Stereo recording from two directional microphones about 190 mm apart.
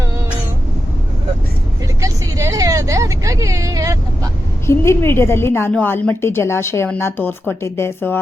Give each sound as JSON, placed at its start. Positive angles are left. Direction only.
{"t": 2.0, "sound": "vehicle", "side_deg": -15}
{"t": 4.6, "sound": "a woman's voice", "side_deg": 15}